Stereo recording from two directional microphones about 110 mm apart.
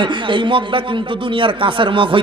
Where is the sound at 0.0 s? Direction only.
50° right (ahead or behind).